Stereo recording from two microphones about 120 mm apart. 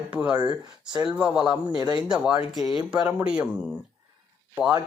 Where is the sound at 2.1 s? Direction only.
10° right (ahead or behind).